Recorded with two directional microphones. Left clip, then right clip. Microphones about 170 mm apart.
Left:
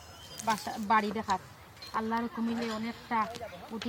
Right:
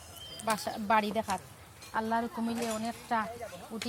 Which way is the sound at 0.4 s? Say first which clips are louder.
Left 1 dB; 35° right (ahead or behind).